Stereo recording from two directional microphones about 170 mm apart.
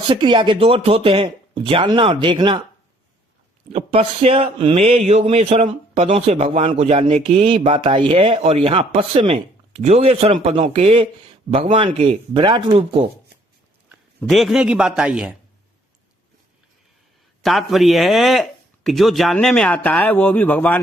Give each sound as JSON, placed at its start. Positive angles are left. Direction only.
{"t": 0.1, "sound": "speech", "side_deg": -30}
{"t": 3.7, "sound": "speech", "side_deg": -40}
{"t": 14.2, "sound": "speech", "side_deg": 0}
{"t": 17.4, "sound": "speech", "side_deg": 0}